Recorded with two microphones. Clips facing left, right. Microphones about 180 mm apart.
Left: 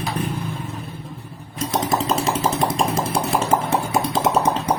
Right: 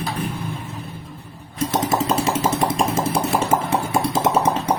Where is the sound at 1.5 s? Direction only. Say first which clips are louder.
Right 1 dB; 5° right (ahead or behind).